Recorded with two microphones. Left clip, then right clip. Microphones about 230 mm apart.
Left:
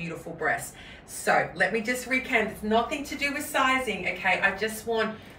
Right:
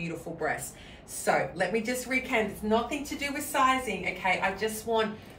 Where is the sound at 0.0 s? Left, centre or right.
Centre.